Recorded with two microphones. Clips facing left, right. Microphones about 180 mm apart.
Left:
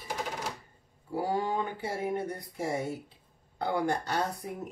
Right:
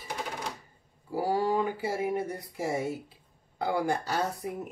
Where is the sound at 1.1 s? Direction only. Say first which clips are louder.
Right 3 dB; 5° right (ahead or behind).